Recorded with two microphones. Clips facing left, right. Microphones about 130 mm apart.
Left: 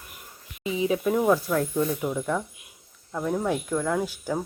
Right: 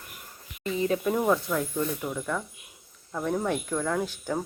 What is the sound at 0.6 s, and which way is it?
Speech, 5° left (ahead or behind).